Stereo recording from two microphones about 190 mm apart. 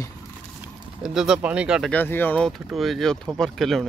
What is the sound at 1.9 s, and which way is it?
Speech, 10° left (ahead or behind).